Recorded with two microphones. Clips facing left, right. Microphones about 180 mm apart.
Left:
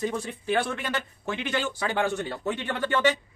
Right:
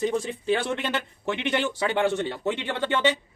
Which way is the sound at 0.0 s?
20° right (ahead or behind).